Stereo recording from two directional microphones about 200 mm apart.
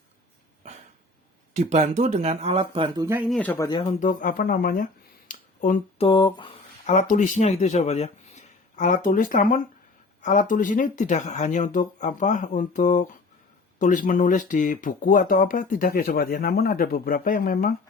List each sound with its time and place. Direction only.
1.5 s speech: 35° right (ahead or behind); by 3.2 s 15° right (ahead or behind)
3.2 s speech: 5° left (ahead or behind)
3.7 s speech: 25° left (ahead or behind)
4.0 s speech: 45° left (ahead or behind)
5.3 s a sound: 45° left (ahead or behind)
6.1 s speech: 25° left (ahead or behind); by 17.7 s 45° left (ahead or behind)